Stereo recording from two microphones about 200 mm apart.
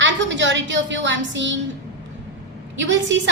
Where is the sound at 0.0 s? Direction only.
65° right (ahead or behind).